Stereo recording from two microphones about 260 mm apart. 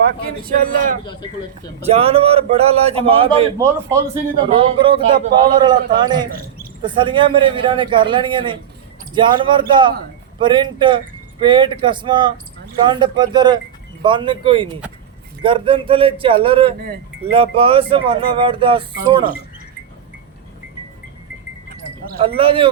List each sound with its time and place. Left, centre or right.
0.4 s a man's voice: right
22.4 s a man's voice: right